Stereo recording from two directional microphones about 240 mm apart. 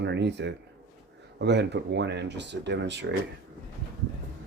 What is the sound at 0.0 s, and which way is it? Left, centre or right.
Speech, right.